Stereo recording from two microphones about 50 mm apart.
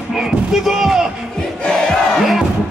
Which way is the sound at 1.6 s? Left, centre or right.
Centre.